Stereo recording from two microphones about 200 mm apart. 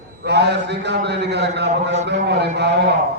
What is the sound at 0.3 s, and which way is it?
A man's voice, 55° right (ahead or behind).